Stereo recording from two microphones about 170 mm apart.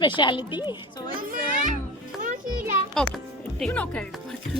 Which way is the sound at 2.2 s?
50° right (ahead or behind).